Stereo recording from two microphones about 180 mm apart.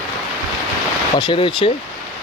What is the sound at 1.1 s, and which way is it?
Speech, 30° left (ahead or behind).